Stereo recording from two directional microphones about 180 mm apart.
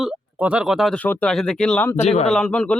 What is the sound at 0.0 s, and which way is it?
A man's voice, 5° right (ahead or behind).